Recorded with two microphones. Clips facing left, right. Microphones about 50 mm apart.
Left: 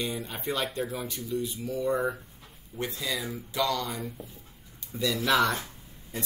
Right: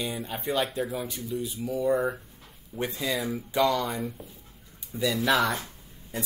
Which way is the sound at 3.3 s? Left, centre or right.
Right.